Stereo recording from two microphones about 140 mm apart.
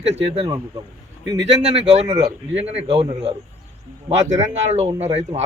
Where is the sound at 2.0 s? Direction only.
25° right (ahead or behind).